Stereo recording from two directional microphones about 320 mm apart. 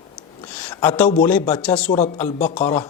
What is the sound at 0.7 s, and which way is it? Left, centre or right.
Speech, centre.